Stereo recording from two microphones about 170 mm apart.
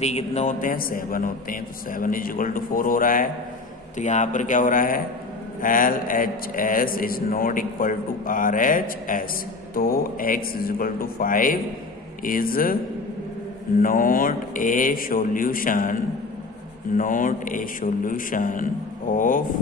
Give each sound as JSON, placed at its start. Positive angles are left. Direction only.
{"t": 0.0, "sound": "a man's voice", "side_deg": 40}
{"t": 13.8, "sound": "a man's voice", "side_deg": 55}